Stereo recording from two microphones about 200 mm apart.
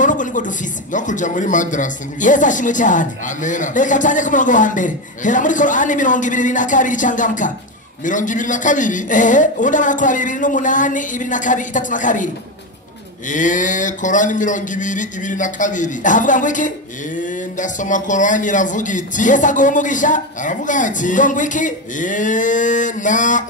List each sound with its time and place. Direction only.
0.0 s speech: 40° left (ahead or behind)
13.3 s speech: 40° left (ahead or behind)